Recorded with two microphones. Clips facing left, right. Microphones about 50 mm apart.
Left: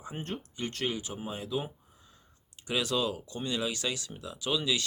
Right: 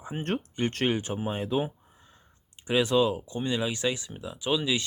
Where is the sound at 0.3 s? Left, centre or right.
Right.